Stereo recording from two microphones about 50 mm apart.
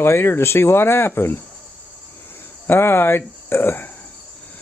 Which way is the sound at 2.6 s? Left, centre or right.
Left.